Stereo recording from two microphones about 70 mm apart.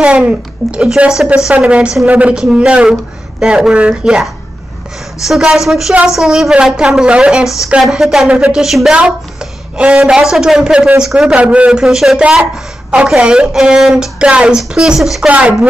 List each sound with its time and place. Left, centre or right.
0.0 s a woman's voice: centre
2.3 s a woman's voice: centre
5.2 s a woman's voice: centre
8.6 s a woman's voice: centre
13.2 s a woman's voice: centre